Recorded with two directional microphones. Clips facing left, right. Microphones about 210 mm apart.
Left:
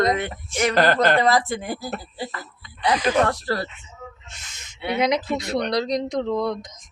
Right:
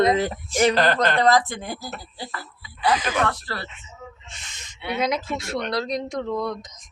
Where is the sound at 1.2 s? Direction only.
10° left (ahead or behind).